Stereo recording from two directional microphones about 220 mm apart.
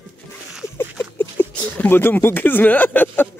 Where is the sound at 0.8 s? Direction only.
10° left (ahead or behind).